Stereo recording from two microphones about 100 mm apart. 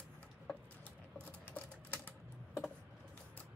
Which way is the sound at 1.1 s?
15° left (ahead or behind).